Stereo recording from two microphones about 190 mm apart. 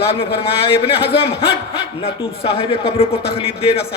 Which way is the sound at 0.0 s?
30° left (ahead or behind).